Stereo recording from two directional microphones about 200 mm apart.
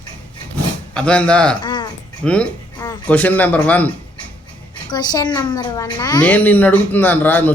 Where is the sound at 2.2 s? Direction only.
5° left (ahead or behind).